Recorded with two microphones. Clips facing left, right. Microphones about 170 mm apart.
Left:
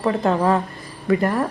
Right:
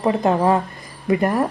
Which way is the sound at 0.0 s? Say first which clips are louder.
Right 1 dB; 15° right (ahead or behind).